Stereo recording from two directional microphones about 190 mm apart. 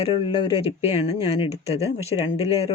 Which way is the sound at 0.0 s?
30° left (ahead or behind).